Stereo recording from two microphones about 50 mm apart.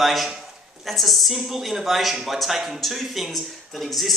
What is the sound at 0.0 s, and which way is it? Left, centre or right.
Speech, centre.